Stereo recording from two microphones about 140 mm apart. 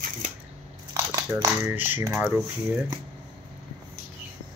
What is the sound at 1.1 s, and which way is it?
Speech, 20° right (ahead or behind).